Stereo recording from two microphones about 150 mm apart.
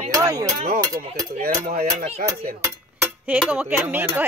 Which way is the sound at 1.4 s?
80° right.